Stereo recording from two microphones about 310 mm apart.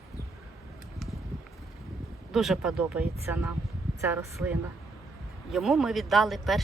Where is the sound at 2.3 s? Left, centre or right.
Centre.